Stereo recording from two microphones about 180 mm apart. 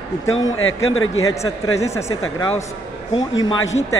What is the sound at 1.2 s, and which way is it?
Speech, 15° left (ahead or behind).